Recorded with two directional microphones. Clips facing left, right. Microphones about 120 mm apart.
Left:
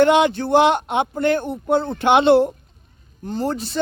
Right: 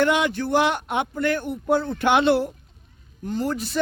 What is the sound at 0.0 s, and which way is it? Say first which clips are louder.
A man's voice: left 6 dB; 25° left (ahead or behind).